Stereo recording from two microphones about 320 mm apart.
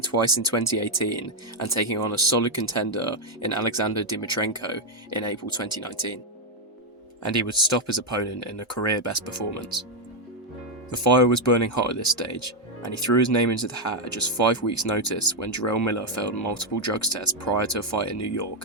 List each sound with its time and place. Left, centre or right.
0.0 s speech: left
7.3 s speech: left
10.9 s speech: left